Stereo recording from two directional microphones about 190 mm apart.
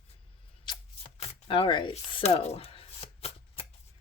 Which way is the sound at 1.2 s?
30° left (ahead or behind).